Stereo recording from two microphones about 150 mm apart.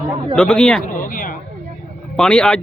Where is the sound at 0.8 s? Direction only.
65° left (ahead or behind).